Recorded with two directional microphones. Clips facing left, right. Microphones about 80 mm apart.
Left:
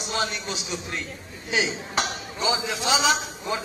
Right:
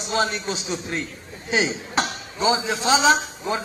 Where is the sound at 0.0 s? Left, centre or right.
Right.